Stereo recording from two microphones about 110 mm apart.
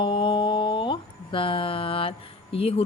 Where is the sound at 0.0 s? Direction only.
50° left (ahead or behind).